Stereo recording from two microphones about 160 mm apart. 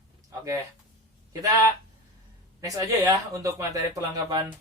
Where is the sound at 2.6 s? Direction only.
20° right (ahead or behind).